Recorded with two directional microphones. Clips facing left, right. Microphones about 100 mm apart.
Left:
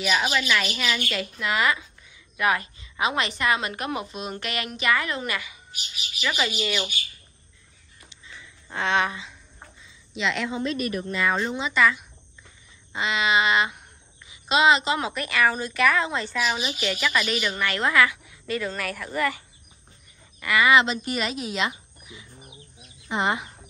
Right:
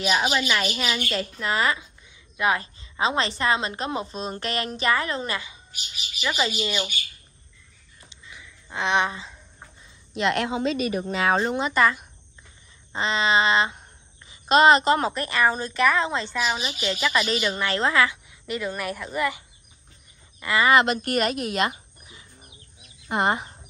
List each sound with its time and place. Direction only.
0.0 s a woman's voice: 20° right (ahead or behind)
1.1 s a sound: 35° right (ahead or behind)
2.3 s a woman's voice: 25° right (ahead or behind)
8.7 s a woman's voice: 20° right (ahead or behind)
10.1 s speech: 50° right (ahead or behind)
10.5 s speech: 90° right
11.3 s speech: 45° right (ahead or behind)
12.9 s a sound: 35° right (ahead or behind)
14.3 s a woman's voice: 45° right (ahead or behind)
15.1 s a woman's voice: 25° right (ahead or behind)
20.7 s speech: 55° right (ahead or behind)
23.0 s speech: 45° right (ahead or behind)